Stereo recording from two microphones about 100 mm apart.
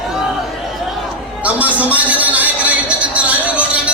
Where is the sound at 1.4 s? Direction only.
15° right (ahead or behind).